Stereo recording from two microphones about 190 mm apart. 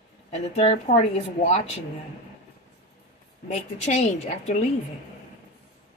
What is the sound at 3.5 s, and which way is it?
A woman's voice, 35° left (ahead or behind).